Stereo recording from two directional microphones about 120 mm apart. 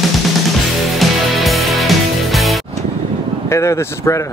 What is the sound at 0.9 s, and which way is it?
Music, centre (ahead or behind).